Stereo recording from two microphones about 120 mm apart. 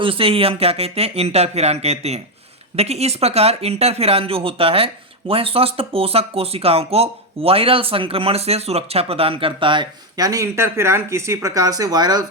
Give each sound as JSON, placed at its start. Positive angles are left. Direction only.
{"t": 0.0, "sound": "speech", "side_deg": -50}
{"t": 10.2, "sound": "speech", "side_deg": -30}